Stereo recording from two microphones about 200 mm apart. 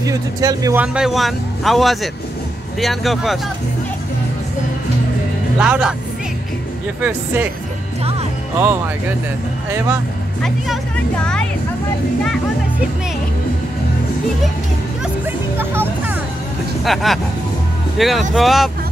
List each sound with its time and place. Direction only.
0.0 s speech: 15° right (ahead or behind)
0.9 s speech: centre (ahead or behind)
5.6 s speech: 5° right (ahead or behind)
7.0 s speech: 10° right (ahead or behind)
9.7 s speech: 10° right (ahead or behind)
15.5 s music: 10° right (ahead or behind)
16.8 s speech: centre (ahead or behind)